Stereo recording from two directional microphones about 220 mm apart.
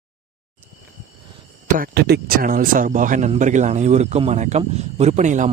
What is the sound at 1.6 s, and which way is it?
Speech, 40° right (ahead or behind).